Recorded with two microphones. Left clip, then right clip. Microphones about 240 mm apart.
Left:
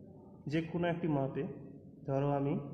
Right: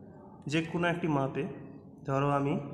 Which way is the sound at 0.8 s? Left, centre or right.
Centre.